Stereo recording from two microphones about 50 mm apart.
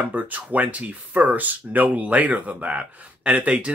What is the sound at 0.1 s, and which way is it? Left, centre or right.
Speech, right.